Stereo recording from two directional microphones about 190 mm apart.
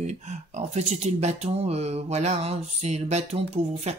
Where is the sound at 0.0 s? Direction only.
40° right (ahead or behind).